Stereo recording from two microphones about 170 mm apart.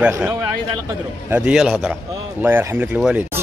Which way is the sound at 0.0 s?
10° right (ahead or behind).